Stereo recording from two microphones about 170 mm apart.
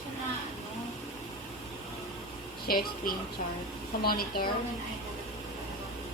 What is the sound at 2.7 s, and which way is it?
Speech, 60° left (ahead or behind).